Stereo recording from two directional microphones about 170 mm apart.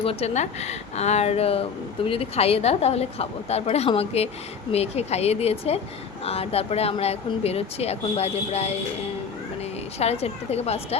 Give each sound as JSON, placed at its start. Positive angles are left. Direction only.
{"t": 0.0, "sound": "speech", "side_deg": 35}
{"t": 10.0, "sound": "speech", "side_deg": 40}